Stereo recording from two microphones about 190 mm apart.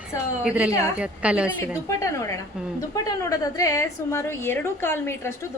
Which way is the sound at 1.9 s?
15° left (ahead or behind).